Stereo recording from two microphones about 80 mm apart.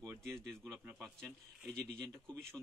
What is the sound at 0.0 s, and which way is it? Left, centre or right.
Speech, right.